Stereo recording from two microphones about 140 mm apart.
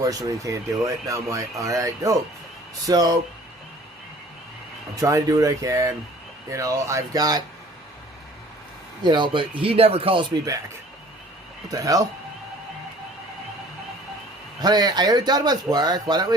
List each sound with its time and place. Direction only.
0.0 s speech: 25° right (ahead or behind)
4.9 s speech: 25° right (ahead or behind)
9.0 s speech: 35° right (ahead or behind)
11.7 s speech: 25° right (ahead or behind)
14.6 s speech: 30° right (ahead or behind)